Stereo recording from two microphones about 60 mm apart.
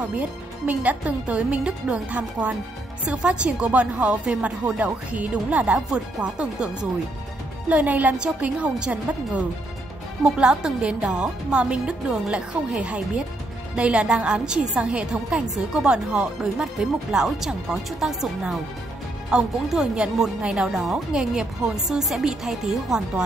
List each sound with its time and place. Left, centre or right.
0.1 s speech: right
7.7 s speech: right; by 23.2 s centre